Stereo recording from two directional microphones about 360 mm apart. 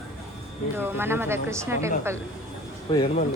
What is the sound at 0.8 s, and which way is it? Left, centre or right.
A woman's voice, centre.